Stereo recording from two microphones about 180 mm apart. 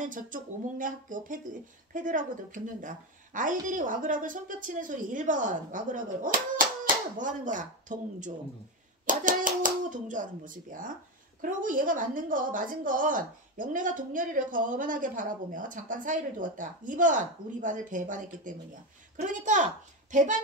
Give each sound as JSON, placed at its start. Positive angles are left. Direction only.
{"t": 0.0, "sound": "a child's voice", "side_deg": -45}